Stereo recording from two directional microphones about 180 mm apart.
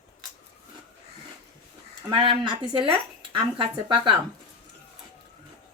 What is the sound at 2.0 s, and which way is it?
Speech, 25° right (ahead or behind).